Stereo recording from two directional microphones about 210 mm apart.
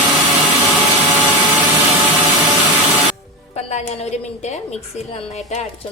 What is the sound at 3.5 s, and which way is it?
A woman's voice, 30° left (ahead or behind).